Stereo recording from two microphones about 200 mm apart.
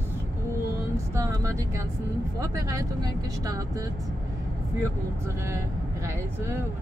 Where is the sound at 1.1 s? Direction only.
15° right (ahead or behind).